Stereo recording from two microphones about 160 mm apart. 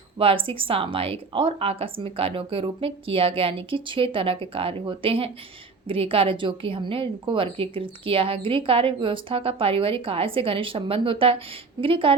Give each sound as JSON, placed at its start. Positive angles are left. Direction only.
{"t": 0.2, "sound": "a woman's voice", "side_deg": -35}